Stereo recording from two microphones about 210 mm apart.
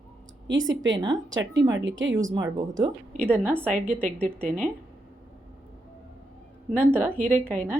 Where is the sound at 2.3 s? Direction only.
15° right (ahead or behind).